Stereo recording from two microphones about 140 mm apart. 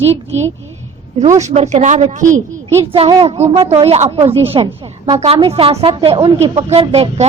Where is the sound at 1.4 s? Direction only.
55° right (ahead or behind).